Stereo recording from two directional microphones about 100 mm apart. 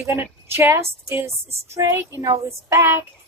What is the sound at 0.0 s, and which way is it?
Child singing, 25° right (ahead or behind).